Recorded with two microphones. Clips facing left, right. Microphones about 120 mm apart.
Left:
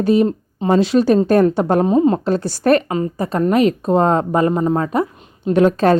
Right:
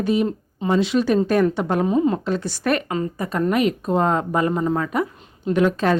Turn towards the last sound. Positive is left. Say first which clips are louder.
# left 5 dB
turn(degrees=35)  # may be behind; listen again after turning